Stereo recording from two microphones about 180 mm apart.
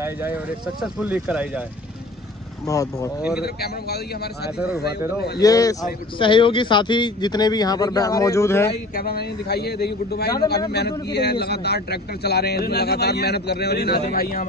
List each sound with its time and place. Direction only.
0.0 s speech: 10° right (ahead or behind)
2.6 s a man's voice: 20° left (ahead or behind)
3.3 s a man's voice: 60° left (ahead or behind)
5.4 s a man's voice: 20° left (ahead or behind)
8.9 s a man's voice: 60° left (ahead or behind)